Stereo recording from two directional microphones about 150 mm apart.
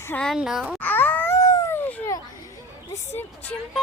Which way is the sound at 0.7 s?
10° left (ahead or behind).